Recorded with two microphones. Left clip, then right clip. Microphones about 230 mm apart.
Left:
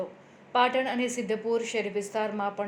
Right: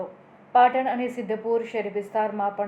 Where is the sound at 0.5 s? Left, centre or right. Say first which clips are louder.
Right 6 dB; left.